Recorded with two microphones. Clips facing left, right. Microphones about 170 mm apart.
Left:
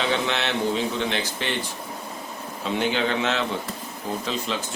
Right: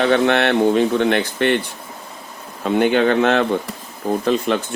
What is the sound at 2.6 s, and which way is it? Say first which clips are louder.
Speech: right 9 dB; 55° right (ahead or behind).